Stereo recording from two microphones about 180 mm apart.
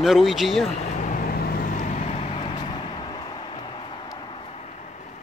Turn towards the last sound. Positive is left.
turn(degrees=40)  # may be behind; listen again after turning